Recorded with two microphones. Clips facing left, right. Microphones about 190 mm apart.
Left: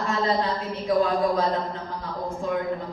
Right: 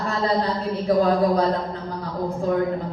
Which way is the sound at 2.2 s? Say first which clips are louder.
Right 5 dB; 35° right (ahead or behind).